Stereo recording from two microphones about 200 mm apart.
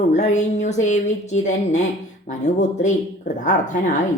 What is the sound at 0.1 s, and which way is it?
A woman's voice, 35° left (ahead or behind).